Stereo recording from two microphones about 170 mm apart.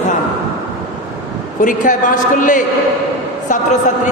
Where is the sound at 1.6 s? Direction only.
50° left (ahead or behind).